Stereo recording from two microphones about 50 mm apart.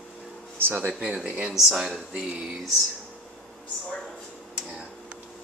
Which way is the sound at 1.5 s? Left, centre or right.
Centre.